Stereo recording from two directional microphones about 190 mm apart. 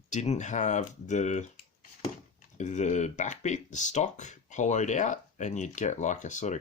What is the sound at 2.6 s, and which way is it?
Speech, 40° left (ahead or behind).